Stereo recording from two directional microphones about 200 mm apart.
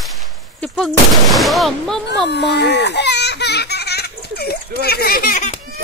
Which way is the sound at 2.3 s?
55° left (ahead or behind).